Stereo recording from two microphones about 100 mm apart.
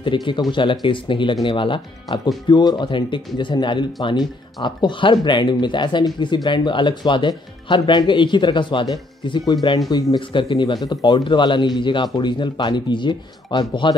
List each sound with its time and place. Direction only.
0.0 s speech: 55° left (ahead or behind)